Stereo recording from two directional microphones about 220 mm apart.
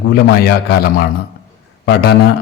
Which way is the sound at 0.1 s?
45° left (ahead or behind).